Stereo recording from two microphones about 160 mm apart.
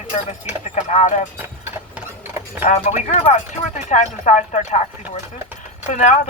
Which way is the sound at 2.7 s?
45° left (ahead or behind).